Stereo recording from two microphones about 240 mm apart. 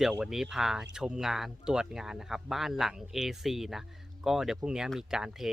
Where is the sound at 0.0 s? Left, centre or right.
Centre.